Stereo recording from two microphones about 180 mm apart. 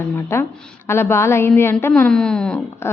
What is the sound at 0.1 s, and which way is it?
A woman's voice, 15° left (ahead or behind).